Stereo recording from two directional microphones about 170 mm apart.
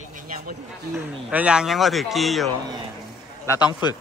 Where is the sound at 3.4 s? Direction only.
25° left (ahead or behind).